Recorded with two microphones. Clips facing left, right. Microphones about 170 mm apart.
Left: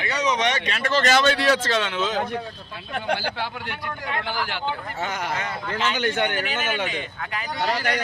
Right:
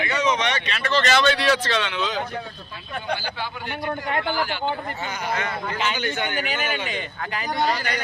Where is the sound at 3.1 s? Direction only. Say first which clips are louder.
Left 2 dB; 70° left (ahead or behind).